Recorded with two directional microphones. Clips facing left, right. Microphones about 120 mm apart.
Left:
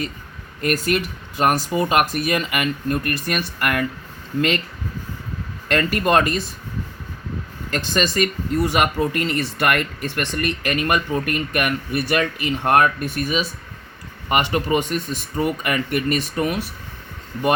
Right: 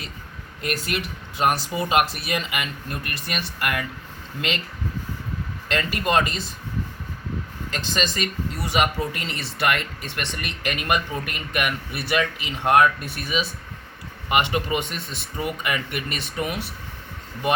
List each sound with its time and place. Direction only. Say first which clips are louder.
0.6 s speech: left 7 dB; 45° left (ahead or behind)
5.6 s speech: left 5 dB; 50° left (ahead or behind)
7.7 s speech: left 5 dB; 50° left (ahead or behind)